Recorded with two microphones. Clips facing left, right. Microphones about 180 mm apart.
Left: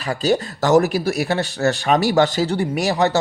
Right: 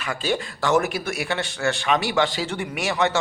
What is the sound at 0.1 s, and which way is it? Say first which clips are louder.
Speech: left 7 dB; 40° left (ahead or behind).